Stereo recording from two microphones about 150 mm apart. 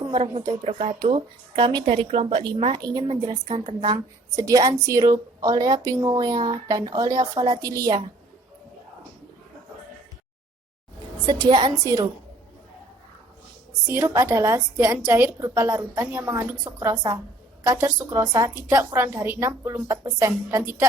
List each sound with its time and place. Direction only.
0.6 s a woman's voice: 45° right (ahead or behind)
2.4 s a woman's voice: 35° right (ahead or behind)
3.4 s a woman's voice: 40° right (ahead or behind); by 8.0 s 25° right (ahead or behind)
11.3 s a woman's voice: 30° right (ahead or behind)
13.8 s a woman's voice: 15° right (ahead or behind)